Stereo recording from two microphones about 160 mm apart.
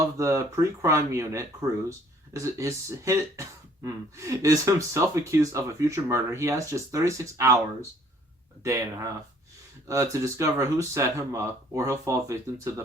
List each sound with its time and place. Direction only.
0.2 s speech: 20° right (ahead or behind)